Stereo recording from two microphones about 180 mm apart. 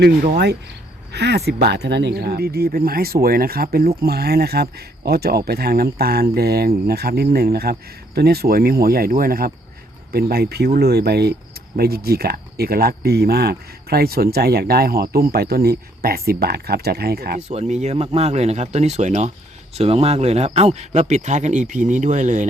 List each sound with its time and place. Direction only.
1.1 s speech: 65° right (ahead or behind)
17.5 s speech: 40° right (ahead or behind)